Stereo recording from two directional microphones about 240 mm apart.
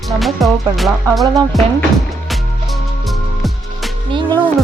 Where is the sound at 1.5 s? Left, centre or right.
Centre.